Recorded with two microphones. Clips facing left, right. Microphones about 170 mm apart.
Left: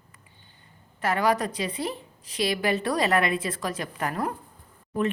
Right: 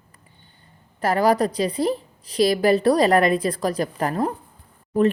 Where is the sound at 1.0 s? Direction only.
35° right (ahead or behind).